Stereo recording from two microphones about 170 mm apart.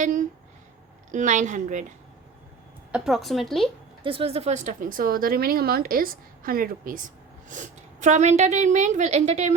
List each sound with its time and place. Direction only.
0.0 s a sound: 50° right (ahead or behind)
1.1 s a woman's voice: 45° right (ahead or behind)
2.9 s a woman's voice: 5° right (ahead or behind)
4.0 s a woman's voice: 35° right (ahead or behind)